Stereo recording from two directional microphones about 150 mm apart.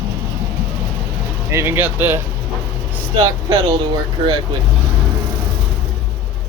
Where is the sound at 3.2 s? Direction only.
25° right (ahead or behind).